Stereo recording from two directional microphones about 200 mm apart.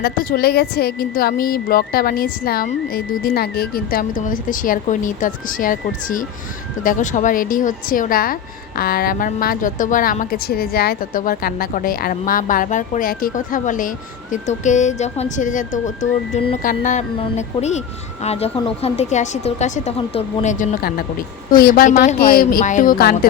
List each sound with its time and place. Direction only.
0.0 s a woman's voice: 50° left (ahead or behind)